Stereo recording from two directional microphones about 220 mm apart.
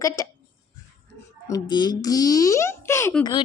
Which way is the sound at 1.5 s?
20° left (ahead or behind).